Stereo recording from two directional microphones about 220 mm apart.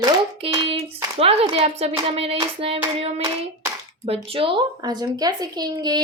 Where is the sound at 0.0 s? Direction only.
25° right (ahead or behind).